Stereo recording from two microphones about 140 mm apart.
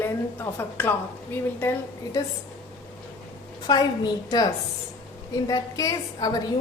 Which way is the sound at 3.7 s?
30° left (ahead or behind).